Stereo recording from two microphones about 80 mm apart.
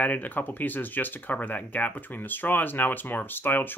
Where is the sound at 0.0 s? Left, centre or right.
Left.